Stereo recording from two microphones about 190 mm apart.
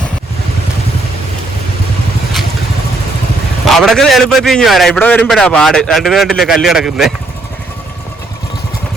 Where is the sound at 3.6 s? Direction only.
Centre (ahead or behind).